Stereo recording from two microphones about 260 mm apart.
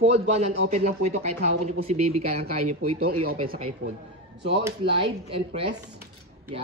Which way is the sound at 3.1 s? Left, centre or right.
Right.